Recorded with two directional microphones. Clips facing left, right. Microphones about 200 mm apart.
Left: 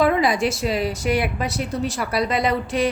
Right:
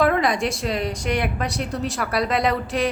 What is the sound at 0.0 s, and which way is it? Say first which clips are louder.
A woman's voice: left 1 dB; centre (ahead or behind).